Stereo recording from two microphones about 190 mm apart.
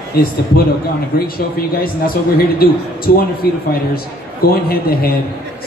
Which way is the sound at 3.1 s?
50° left (ahead or behind).